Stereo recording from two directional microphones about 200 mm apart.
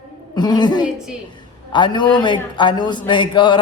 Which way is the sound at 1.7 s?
25° left (ahead or behind).